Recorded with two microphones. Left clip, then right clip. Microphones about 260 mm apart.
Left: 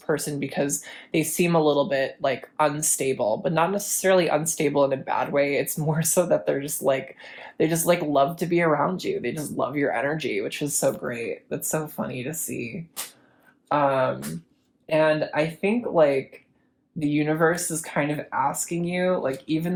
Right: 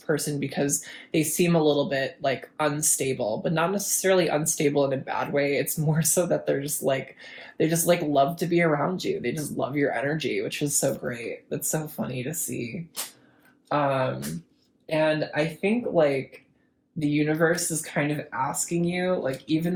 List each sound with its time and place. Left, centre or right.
0.1 s speech: left
13.7 s speech: left